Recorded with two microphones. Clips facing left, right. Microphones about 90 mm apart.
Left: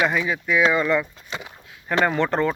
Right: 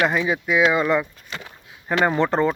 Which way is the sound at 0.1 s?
15° right (ahead or behind).